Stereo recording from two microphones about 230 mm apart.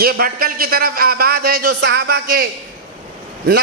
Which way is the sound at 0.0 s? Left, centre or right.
Right.